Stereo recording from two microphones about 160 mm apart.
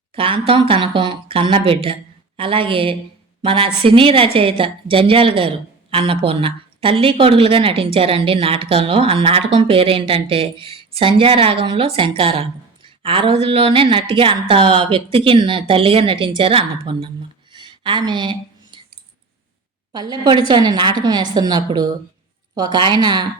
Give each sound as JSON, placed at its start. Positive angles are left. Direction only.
{"t": 0.2, "sound": "a woman's voice", "side_deg": -35}
{"t": 17.5, "sound": "a sound", "side_deg": -30}
{"t": 19.9, "sound": "a woman's voice", "side_deg": -25}